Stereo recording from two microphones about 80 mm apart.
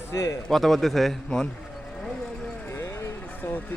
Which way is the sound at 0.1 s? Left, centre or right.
Left.